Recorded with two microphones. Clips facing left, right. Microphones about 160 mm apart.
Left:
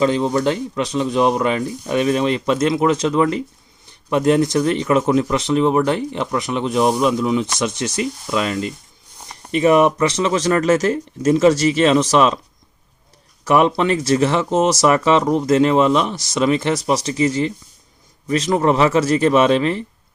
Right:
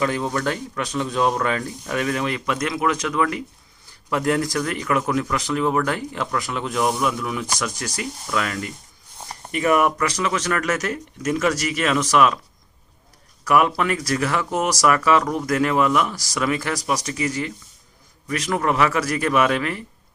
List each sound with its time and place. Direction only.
0.0 s speech: 20° left (ahead or behind)
13.4 s speech: 25° left (ahead or behind)